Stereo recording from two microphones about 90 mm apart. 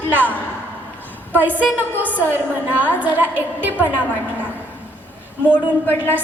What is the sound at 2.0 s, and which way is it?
A woman's voice, 20° right (ahead or behind).